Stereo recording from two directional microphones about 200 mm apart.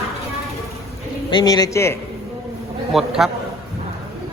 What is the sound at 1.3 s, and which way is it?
Speech, 20° left (ahead or behind).